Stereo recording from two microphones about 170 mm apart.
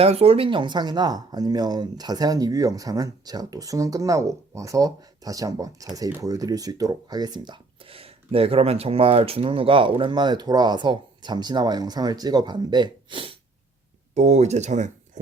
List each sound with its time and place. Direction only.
0.0 s speech: 35° right (ahead or behind)
14.1 s speech: 40° right (ahead or behind)